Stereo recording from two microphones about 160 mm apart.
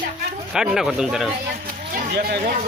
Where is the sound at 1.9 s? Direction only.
70° right (ahead or behind).